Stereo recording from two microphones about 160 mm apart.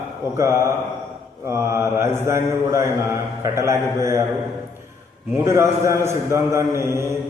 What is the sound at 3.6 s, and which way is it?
Mantra, 20° right (ahead or behind).